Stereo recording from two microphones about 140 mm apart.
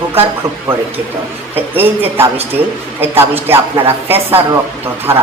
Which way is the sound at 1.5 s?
15° right (ahead or behind).